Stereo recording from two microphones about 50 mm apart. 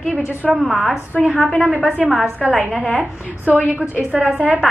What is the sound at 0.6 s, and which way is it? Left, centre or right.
Speech, centre.